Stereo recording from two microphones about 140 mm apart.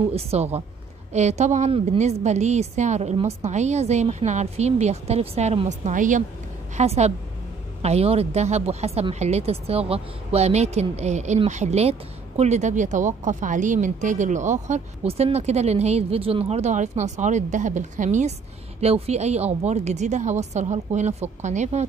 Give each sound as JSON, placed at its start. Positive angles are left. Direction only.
{"t": 0.1, "sound": "speech", "side_deg": -45}
{"t": 6.8, "sound": "speech", "side_deg": -50}
{"t": 18.8, "sound": "speech", "side_deg": -50}